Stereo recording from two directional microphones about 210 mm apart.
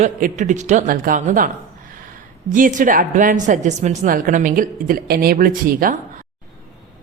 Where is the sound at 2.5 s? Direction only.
35° right (ahead or behind).